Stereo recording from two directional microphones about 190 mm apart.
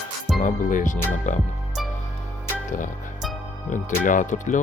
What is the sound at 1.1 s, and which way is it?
Speech, 40° left (ahead or behind).